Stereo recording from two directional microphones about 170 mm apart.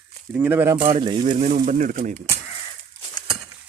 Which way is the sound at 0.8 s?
35° right (ahead or behind).